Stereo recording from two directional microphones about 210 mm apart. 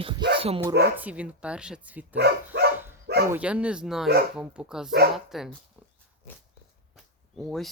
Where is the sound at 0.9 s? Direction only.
5° right (ahead or behind).